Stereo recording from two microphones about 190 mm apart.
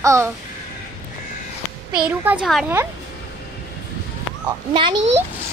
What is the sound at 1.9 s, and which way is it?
Speech, 10° right (ahead or behind).